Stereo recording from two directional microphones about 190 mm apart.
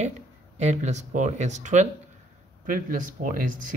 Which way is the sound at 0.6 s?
35° right (ahead or behind).